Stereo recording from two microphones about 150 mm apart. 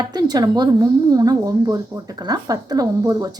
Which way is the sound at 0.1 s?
25° right (ahead or behind).